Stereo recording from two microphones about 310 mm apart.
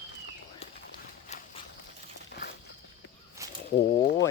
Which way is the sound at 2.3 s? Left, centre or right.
Left.